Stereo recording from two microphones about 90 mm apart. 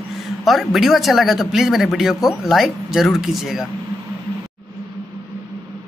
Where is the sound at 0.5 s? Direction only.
Centre (ahead or behind).